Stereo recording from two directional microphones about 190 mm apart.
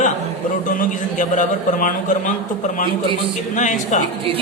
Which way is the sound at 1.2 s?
40° left (ahead or behind).